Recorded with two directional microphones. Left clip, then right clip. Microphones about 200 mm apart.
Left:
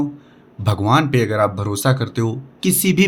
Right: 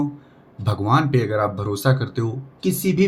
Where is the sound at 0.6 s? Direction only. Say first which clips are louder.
Left 3 dB; 30° left (ahead or behind).